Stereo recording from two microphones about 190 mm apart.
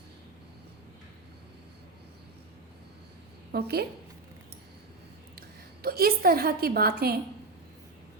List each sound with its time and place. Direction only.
3.5 s a woman's voice: 60° right (ahead or behind)
5.8 s a woman's voice: 55° right (ahead or behind)